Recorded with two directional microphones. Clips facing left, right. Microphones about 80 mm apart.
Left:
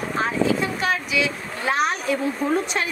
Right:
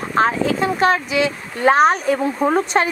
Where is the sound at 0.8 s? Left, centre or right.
Right.